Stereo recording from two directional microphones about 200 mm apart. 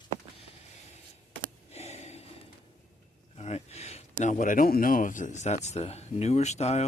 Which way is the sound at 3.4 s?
30° left (ahead or behind).